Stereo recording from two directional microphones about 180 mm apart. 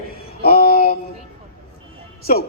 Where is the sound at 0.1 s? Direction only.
60° left (ahead or behind).